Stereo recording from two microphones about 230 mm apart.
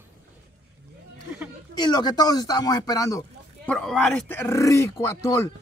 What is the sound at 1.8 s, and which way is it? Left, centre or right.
Speech, centre.